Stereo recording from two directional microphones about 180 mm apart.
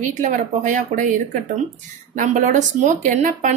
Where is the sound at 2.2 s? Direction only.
45° right (ahead or behind).